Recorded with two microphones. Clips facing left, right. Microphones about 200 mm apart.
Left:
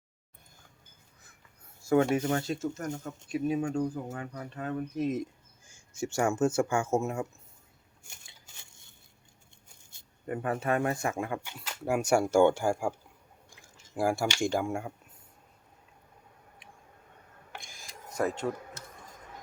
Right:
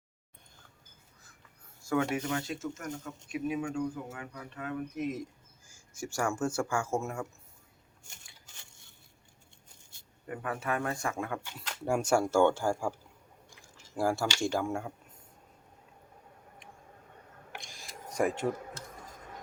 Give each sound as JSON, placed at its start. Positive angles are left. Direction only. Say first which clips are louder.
{"t": 1.9, "sound": "speech", "louder": "left 5 dB", "side_deg": 30}
{"t": 5.6, "sound": "speech", "louder": "left 6 dB", "side_deg": 25}
{"t": 10.2, "sound": "speech", "louder": "left 5 dB", "side_deg": 30}
{"t": 11.3, "sound": "speech", "louder": "left 2 dB", "side_deg": 5}
{"t": 13.9, "sound": "speech", "louder": "left 2 dB", "side_deg": 10}
{"t": 17.6, "sound": "a sound", "louder": "right 2 dB", "side_deg": 0}
{"t": 18.1, "sound": "speech", "louder": "right 1 dB", "side_deg": -15}